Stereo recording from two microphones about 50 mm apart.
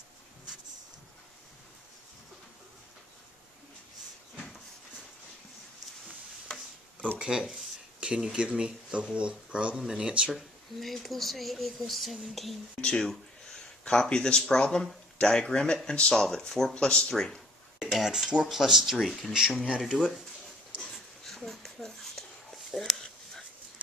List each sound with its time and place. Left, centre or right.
6.0 s stir: centre
7.2 s speech: centre
9.8 s speech: centre
10.3 s speech: centre
16.7 s speech: centre
17.9 s speech: centre
19.3 s speech: centre
19.8 s speech: centre
21.2 s a sound: centre